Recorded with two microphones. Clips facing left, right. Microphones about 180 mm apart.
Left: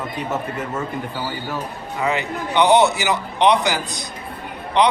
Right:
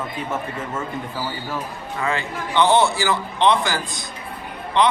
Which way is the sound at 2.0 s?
20° left (ahead or behind).